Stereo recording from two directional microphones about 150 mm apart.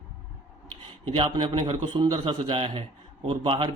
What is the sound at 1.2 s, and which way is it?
Speech, 35° right (ahead or behind).